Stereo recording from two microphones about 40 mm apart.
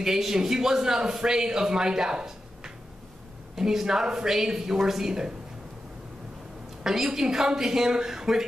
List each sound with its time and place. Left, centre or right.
0.0 s speech: centre
6.8 s speech: centre